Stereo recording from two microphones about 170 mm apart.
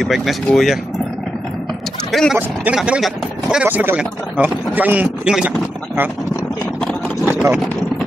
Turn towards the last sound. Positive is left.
turn(degrees=-10)  # may be behind; listen again after turning